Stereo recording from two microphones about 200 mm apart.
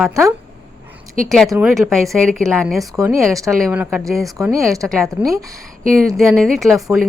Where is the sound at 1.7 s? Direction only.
Centre (ahead or behind).